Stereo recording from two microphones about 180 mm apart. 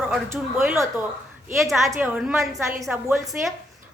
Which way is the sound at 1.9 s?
10° right (ahead or behind).